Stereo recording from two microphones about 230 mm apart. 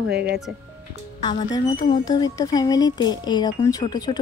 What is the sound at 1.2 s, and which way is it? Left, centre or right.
A woman's voice, centre.